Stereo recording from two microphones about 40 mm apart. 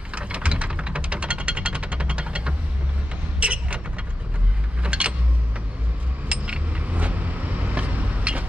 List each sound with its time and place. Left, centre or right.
0.1 s a sound: right
4.8 s vehicle: right
6.2 s vehicle: right